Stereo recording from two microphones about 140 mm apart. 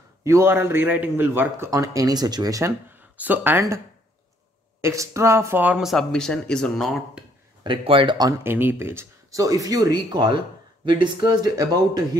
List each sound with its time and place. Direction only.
0.2 s a man's voice: 20° right (ahead or behind)
1.7 s speech: 25° right (ahead or behind)
4.8 s speech: 20° right (ahead or behind); by 7.2 s centre (ahead or behind)
7.6 s speech: 35° right (ahead or behind)
8.5 s speech: 15° right (ahead or behind)